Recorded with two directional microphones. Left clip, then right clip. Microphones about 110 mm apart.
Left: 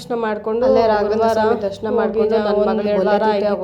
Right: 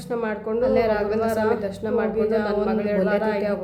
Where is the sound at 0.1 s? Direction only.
25° left (ahead or behind).